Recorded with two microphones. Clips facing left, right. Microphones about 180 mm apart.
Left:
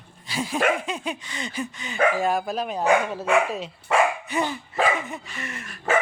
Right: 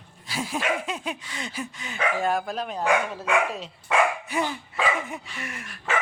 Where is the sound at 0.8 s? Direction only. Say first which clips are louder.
Left 2 dB; 5° right (ahead or behind).